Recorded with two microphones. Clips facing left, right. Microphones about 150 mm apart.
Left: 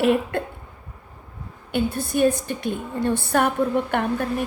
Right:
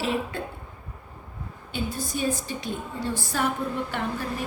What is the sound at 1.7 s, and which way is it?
A woman's voice, 60° left (ahead or behind).